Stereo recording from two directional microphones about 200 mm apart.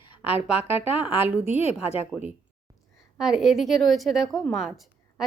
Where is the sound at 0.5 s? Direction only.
30° left (ahead or behind).